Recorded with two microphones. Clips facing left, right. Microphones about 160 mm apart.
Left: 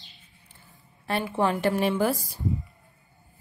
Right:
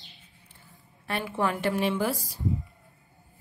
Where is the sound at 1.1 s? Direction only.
30° left (ahead or behind).